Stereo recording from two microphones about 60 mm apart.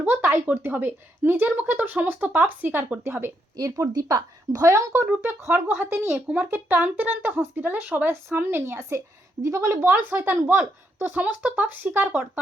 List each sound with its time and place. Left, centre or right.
0.0 s speech: right
3.6 s speech: right
4.6 s speech: right
4.9 s speech: right
9.4 s a woman's voice: right
9.8 s speech: right